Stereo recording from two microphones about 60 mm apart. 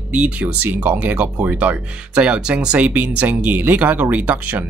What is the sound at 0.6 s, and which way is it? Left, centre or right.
Speech, right.